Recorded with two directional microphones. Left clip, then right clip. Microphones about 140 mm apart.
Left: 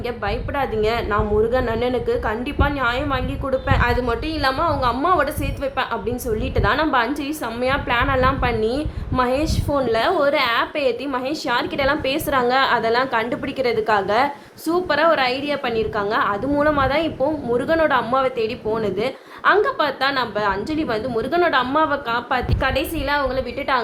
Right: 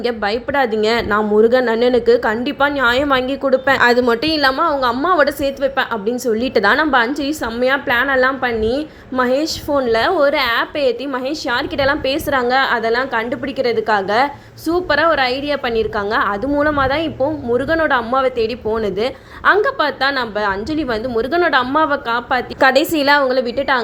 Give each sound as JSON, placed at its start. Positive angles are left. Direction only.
{"t": 0.0, "sound": "a woman's voice", "side_deg": -35}
{"t": 23.0, "sound": "a woman's voice", "side_deg": -60}
{"t": 23.3, "sound": "a woman's voice", "side_deg": -30}